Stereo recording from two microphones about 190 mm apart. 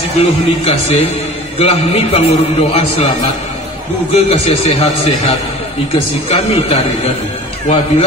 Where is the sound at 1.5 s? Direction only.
35° left (ahead or behind).